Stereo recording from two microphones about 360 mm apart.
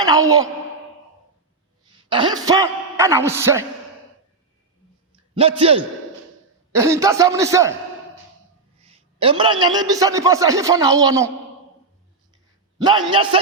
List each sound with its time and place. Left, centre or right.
1.9 s a man's voice: centre
5.3 s a man's voice: centre
8.8 s a man's voice: centre
12.8 s a man's voice: centre